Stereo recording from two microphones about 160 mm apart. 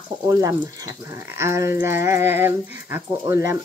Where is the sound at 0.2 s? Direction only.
15° right (ahead or behind).